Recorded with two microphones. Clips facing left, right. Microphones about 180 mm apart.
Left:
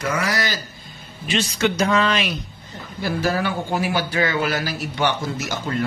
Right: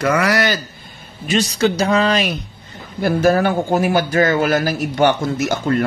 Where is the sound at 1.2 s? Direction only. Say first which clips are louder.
Right 5 dB; 40° right (ahead or behind).